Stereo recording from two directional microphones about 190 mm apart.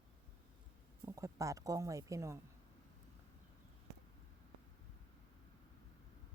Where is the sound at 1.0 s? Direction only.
15° right (ahead or behind).